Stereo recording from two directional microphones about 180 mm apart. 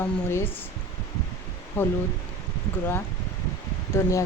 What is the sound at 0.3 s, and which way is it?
Speech, 15° left (ahead or behind).